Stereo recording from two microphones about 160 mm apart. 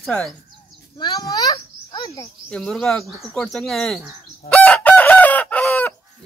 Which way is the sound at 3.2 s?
Centre (ahead or behind).